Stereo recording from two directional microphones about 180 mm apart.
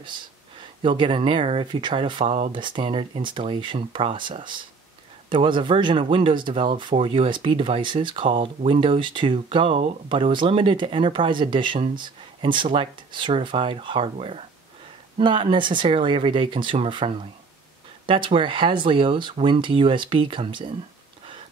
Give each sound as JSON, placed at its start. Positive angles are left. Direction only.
{"t": 0.8, "sound": "speech", "side_deg": -30}